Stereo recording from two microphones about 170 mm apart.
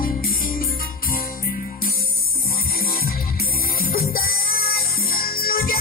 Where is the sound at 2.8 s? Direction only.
60° left (ahead or behind).